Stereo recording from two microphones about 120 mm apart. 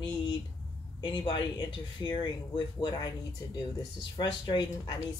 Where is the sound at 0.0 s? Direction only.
40° left (ahead or behind).